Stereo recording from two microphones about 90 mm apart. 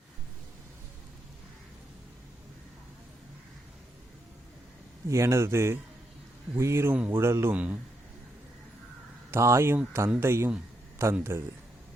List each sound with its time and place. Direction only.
5.0 s speech: 30° right (ahead or behind)
7.5 s a man's voice: 15° right (ahead or behind)
9.3 s speech: 30° right (ahead or behind)